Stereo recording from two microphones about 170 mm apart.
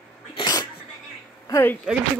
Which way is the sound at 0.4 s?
20° left (ahead or behind).